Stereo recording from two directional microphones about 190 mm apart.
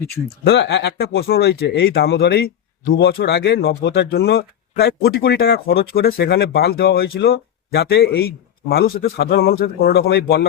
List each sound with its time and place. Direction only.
0.4 s speech: 65° left (ahead or behind)